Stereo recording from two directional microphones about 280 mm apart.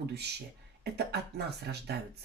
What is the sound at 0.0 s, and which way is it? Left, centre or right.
Speech, right.